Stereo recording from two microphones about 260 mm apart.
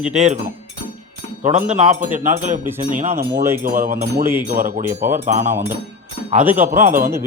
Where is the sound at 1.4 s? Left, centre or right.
Right.